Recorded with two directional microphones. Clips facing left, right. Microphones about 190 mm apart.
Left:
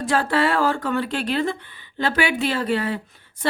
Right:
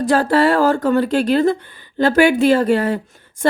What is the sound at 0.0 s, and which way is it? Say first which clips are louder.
A woman's voice: right 6 dB; 40° right (ahead or behind).